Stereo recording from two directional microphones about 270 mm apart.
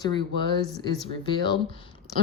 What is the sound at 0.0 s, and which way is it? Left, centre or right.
Speech, centre.